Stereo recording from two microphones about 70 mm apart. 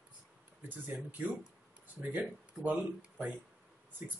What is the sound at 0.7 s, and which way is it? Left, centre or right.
Speech, right.